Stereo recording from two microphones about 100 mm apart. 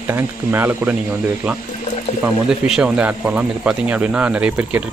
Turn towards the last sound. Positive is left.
turn(degrees=-15)  # may be behind; listen again after turning